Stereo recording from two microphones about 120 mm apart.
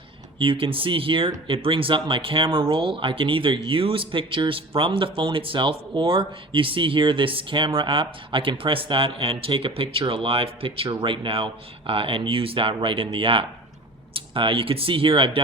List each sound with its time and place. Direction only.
0.3 s speech: 45° right (ahead or behind)